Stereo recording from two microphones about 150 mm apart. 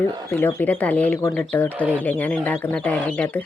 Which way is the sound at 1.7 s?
10° right (ahead or behind).